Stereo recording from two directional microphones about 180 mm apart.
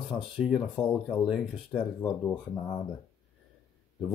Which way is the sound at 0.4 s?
Centre (ahead or behind).